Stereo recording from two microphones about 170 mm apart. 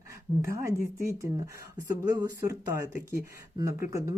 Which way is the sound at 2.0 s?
20° right (ahead or behind).